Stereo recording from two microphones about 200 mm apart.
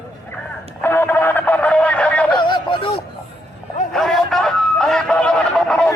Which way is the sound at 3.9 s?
Centre (ahead or behind).